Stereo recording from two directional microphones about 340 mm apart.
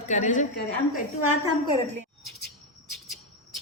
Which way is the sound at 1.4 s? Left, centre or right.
Centre.